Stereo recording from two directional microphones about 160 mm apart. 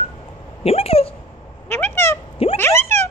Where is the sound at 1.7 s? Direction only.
15° left (ahead or behind).